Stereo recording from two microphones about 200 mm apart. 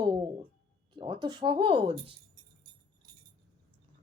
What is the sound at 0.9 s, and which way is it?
A woman's voice, 25° right (ahead or behind).